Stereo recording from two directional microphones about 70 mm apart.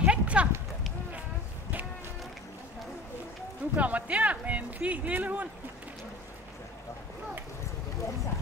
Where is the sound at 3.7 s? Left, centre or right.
Right.